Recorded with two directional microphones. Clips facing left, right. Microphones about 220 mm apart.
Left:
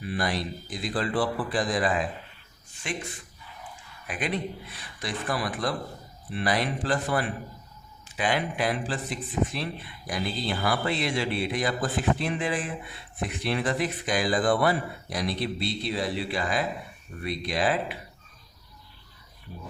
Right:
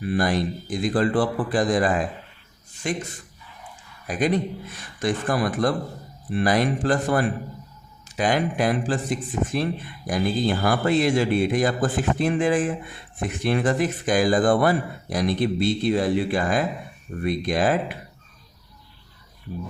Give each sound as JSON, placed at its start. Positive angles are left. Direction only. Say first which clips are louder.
{"t": 0.0, "sound": "speech", "louder": "right 7 dB", "side_deg": -50}
{"t": 4.0, "sound": "speech", "louder": "right 8 dB", "side_deg": -40}